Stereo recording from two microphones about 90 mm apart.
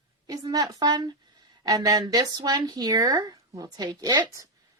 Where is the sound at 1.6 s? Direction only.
40° right (ahead or behind).